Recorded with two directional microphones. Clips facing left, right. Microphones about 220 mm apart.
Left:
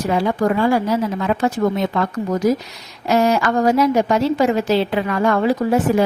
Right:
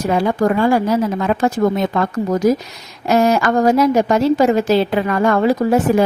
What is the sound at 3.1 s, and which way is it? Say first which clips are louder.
A woman's voice: right 2 dB; 45° right (ahead or behind).